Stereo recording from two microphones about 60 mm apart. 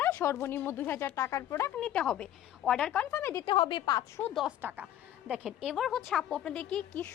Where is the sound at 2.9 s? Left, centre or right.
Left.